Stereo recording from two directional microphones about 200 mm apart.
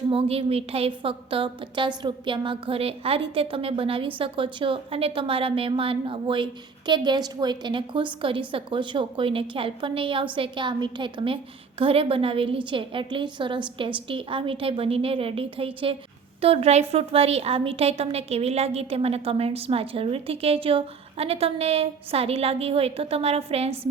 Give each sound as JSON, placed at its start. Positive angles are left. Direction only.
{"t": 0.1, "sound": "a woman's voice", "side_deg": -30}